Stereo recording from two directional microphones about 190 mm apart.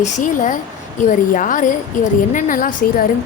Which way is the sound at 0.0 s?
40° left (ahead or behind).